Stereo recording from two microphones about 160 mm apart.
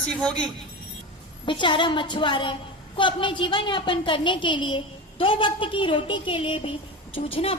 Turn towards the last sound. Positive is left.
turn(degrees=35)  # may be behind; listen again after turning